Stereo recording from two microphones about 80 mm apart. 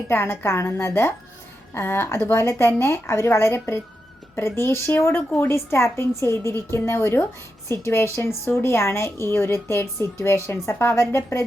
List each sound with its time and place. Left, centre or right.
0.1 s speech: left